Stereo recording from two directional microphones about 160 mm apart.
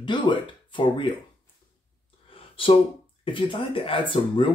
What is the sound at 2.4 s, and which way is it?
Speech, 35° left (ahead or behind).